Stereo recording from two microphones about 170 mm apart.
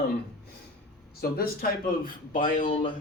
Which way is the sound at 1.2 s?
60° left (ahead or behind).